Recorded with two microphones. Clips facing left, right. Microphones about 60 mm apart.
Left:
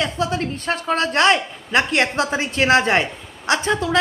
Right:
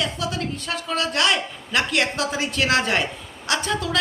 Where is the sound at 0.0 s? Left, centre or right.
Left.